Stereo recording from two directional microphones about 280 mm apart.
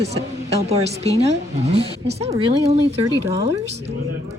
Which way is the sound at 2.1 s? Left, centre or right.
Centre.